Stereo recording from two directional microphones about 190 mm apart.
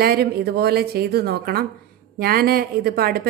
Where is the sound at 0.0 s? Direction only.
55° right (ahead or behind).